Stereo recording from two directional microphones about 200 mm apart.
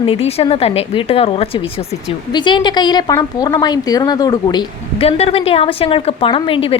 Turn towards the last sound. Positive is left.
turn(degrees=25)  # may be behind; listen again after turning